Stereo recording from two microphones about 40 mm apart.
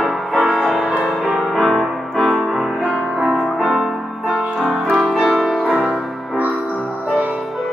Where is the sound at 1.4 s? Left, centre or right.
Centre.